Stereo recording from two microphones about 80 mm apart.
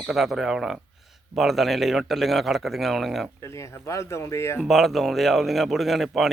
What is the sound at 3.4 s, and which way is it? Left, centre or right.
Speech, left.